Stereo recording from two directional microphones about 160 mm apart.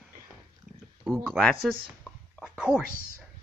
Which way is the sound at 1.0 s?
Centre (ahead or behind).